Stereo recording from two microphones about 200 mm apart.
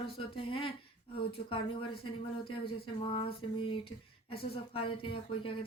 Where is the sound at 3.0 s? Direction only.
25° left (ahead or behind).